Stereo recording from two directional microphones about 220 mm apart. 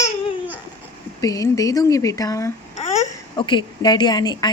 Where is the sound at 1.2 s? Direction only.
15° left (ahead or behind).